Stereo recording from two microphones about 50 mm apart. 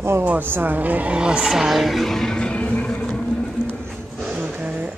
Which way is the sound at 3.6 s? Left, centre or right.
Left.